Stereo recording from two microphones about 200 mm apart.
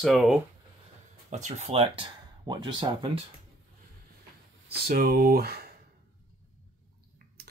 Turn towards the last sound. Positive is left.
turn(degrees=-50)  # may be behind; listen again after turning